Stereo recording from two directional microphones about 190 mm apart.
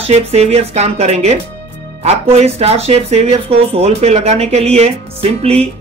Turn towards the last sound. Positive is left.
turn(degrees=-35)  # may be behind; listen again after turning